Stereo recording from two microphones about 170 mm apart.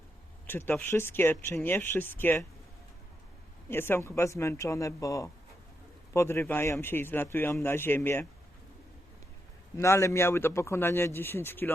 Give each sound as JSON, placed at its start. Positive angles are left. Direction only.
{"t": 0.4, "sound": "speech", "side_deg": 15}
{"t": 3.7, "sound": "speech", "side_deg": 15}
{"t": 9.7, "sound": "speech", "side_deg": 15}